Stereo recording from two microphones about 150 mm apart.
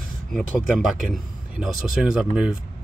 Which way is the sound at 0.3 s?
Centre (ahead or behind).